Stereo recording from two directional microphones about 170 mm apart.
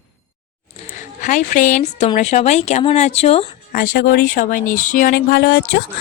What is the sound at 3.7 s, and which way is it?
Speech, 65° left (ahead or behind).